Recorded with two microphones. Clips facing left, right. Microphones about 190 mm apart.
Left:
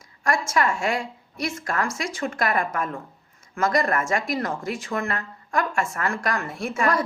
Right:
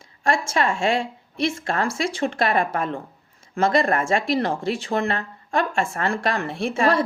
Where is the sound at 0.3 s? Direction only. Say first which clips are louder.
Right 1 dB; 25° right (ahead or behind).